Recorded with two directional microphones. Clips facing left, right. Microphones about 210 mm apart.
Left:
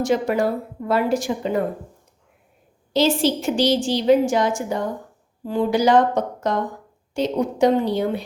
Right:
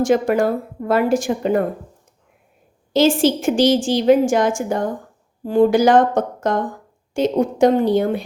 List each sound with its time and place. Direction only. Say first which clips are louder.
0.0 s a woman's voice: right 4 dB; 50° right (ahead or behind)
2.9 s a woman's voice: right 4 dB; 50° right (ahead or behind)